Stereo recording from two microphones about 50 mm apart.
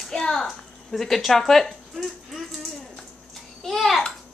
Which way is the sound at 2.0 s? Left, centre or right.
Centre.